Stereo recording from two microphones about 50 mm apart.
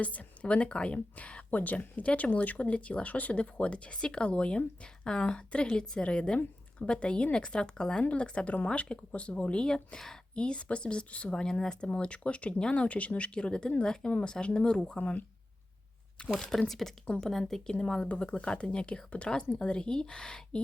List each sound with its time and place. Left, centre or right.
0.0 s speech: left; by 10.2 s centre
10.3 s speech: left
14.8 s speech: left
16.4 s speech: centre